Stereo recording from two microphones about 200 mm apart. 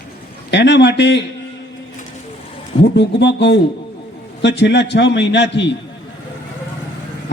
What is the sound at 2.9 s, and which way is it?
A man's voice, 60° left (ahead or behind).